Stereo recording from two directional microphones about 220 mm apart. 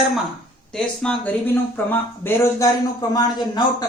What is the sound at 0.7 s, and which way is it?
Speech, 5° left (ahead or behind).